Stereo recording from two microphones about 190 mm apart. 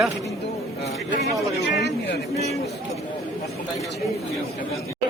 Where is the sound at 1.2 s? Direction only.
60° left (ahead or behind).